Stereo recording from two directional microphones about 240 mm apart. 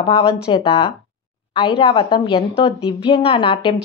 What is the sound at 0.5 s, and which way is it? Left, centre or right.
A woman's voice, left.